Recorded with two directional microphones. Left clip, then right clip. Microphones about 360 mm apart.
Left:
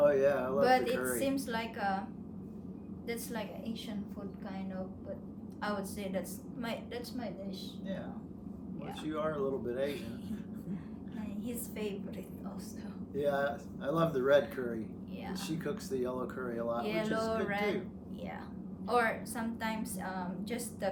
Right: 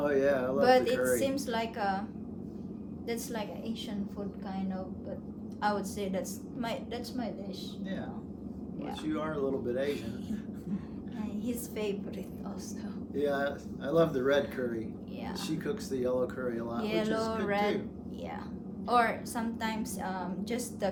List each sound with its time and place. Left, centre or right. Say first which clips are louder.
0.0 s a sound: even; centre
0.6 s a man's voice: right 4 dB; centre
0.9 s a man's voice: right 6 dB; centre
1.2 s a woman's voice: right 3 dB; centre
3.1 s a man's voice: right 3 dB; centre
5.6 s a man's voice: right 6 dB; centre
9.0 s a man's voice: right 1 dB; centre
13.1 s a man's voice: right 1 dB; centre
16.8 s a man's voice: right 3 dB; centre
18.9 s a woman's voice: right 3 dB; centre